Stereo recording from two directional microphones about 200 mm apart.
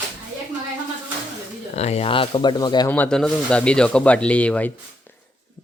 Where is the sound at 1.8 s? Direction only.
30° left (ahead or behind).